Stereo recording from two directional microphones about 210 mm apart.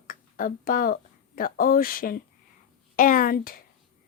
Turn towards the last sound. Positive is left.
turn(degrees=45)  # may be behind; listen again after turning